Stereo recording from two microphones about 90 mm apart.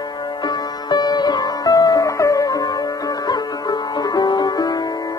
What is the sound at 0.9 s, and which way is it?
Music, 50° left (ahead or behind).